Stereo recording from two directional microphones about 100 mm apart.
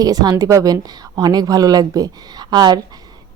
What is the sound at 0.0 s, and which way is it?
A woman's voice, 40° right (ahead or behind).